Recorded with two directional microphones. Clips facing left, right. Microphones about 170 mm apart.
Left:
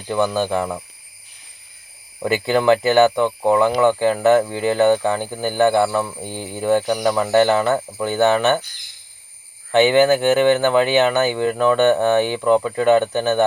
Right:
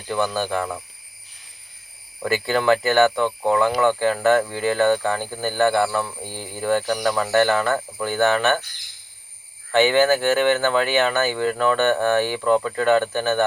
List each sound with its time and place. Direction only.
0.1 s speech: 15° left (ahead or behind)
2.2 s speech: 15° left (ahead or behind)
9.7 s speech: 20° left (ahead or behind)